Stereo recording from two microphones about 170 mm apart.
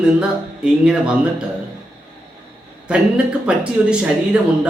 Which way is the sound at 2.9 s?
5° right (ahead or behind).